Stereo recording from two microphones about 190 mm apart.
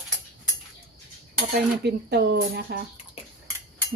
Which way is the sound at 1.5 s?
60° right (ahead or behind).